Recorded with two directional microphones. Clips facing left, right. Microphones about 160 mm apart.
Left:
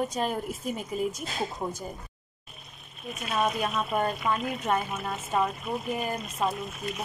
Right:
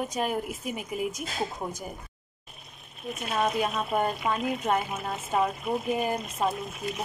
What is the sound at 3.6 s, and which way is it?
Speech, 15° right (ahead or behind).